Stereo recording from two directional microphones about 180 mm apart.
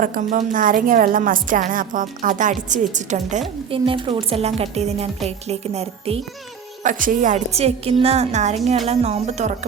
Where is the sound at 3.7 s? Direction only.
30° right (ahead or behind).